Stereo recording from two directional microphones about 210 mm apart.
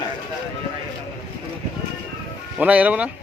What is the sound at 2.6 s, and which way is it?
Speech, 5° right (ahead or behind).